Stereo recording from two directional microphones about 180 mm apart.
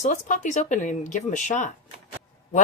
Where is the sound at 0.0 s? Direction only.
40° left (ahead or behind).